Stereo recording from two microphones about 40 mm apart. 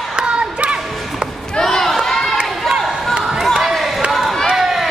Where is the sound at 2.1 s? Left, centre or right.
Centre.